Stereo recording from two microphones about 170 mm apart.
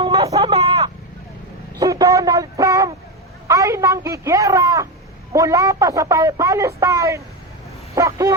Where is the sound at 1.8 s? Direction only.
20° right (ahead or behind).